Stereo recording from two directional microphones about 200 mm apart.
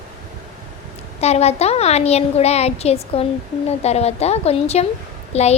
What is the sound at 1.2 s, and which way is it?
A child's voice, 30° left (ahead or behind).